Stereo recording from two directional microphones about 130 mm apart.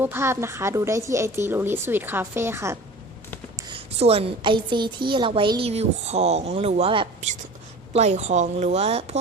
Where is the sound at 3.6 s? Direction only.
35° right (ahead or behind).